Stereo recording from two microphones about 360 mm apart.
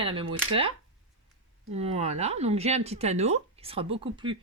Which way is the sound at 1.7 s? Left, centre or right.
Centre.